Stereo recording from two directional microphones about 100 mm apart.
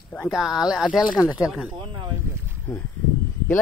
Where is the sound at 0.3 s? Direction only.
Centre (ahead or behind).